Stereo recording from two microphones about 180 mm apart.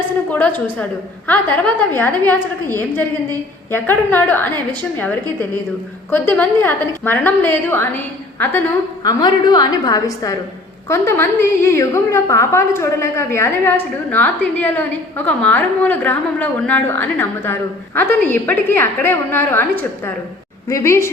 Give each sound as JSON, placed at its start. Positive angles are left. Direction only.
{"t": 0.3, "sound": "a woman's voice", "side_deg": 10}
{"t": 9.0, "sound": "a woman's voice", "side_deg": 20}